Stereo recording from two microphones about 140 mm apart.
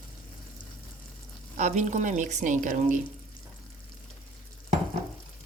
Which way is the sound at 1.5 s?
60° right (ahead or behind).